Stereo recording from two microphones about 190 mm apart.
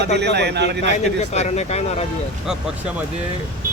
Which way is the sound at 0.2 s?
60° right (ahead or behind).